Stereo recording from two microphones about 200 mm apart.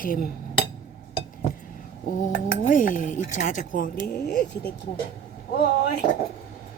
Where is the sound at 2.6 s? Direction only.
40° left (ahead or behind).